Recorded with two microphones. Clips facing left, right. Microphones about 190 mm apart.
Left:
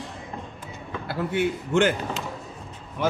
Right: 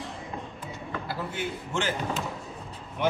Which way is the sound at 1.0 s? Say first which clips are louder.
Left 10 dB; 60° left (ahead or behind).